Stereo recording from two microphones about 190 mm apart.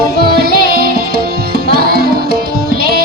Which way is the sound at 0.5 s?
55° right (ahead or behind).